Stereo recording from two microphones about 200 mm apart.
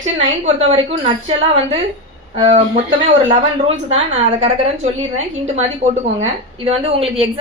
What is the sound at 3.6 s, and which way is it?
Speech, 30° right (ahead or behind).